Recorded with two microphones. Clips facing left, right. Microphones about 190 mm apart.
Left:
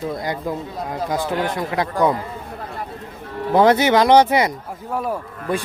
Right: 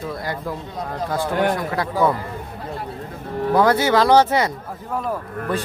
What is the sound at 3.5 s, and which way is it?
Speech, 20° left (ahead or behind).